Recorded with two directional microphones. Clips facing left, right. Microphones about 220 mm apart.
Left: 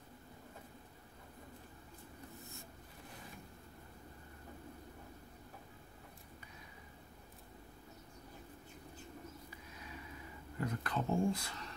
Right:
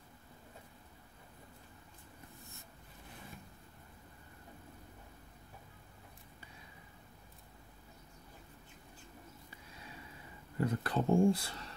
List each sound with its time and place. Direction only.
10.6 s speech: 30° right (ahead or behind)